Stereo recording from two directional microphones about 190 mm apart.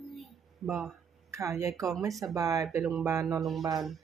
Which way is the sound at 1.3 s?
15° right (ahead or behind).